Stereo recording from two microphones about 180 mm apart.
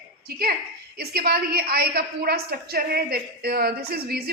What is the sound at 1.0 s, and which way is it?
A woman's voice, 60° right (ahead or behind).